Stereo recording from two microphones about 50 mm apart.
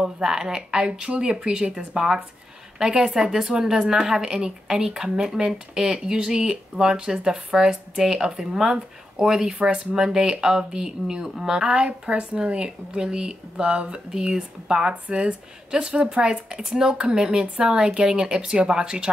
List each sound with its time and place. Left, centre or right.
0.0 s speech: centre